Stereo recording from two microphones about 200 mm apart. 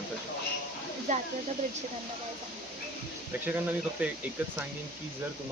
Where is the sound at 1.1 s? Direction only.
40° right (ahead or behind).